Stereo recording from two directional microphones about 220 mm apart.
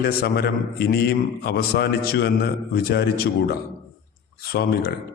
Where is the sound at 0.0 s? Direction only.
45° left (ahead or behind).